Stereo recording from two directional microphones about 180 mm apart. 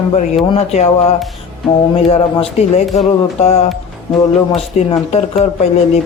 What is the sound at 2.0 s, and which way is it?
Speech, 35° left (ahead or behind).